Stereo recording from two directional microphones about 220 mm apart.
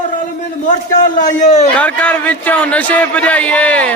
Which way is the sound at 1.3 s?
35° left (ahead or behind).